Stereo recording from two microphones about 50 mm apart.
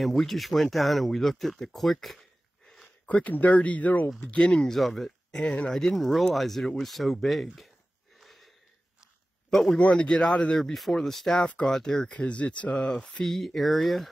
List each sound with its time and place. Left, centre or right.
0.0 s speech: centre
3.1 s speech: left
4.4 s speech: centre
5.3 s speech: centre
8.2 s a sound: centre
9.5 s a man's voice: centre
9.8 s speech: left
10.6 s speech: centre
12.1 s speech: left; by 14.0 s centre